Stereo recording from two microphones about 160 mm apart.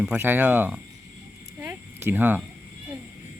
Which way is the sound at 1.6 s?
15° right (ahead or behind).